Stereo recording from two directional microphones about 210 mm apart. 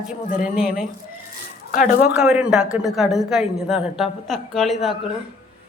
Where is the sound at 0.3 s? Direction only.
35° left (ahead or behind).